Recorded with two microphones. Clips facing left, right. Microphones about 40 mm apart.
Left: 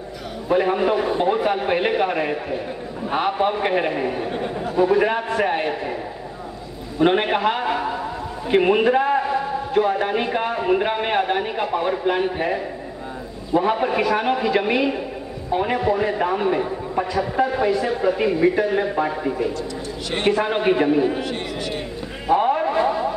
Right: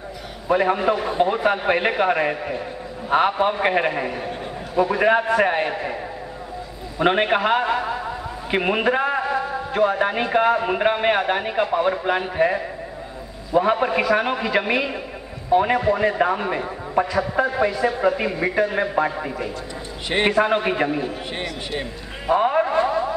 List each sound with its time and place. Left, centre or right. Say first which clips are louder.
0.5 s a man's voice: even; centre
7.0 s a man's voice: even; centre
12.4 s a man's voice: right 4 dB; centre
13.6 s a man's voice: right 1 dB; centre
20.1 s a man's voice: right 1 dB; right
20.3 s a man's voice: even; centre
22.2 s speech: even; centre
22.7 s a sound: even; centre